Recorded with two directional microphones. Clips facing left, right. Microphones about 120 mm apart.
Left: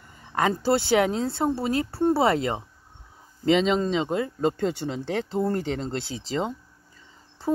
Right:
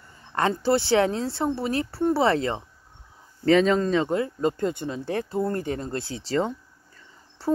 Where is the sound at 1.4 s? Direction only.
25° left (ahead or behind).